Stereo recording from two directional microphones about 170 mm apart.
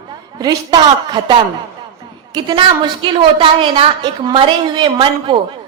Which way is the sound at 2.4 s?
25° right (ahead or behind).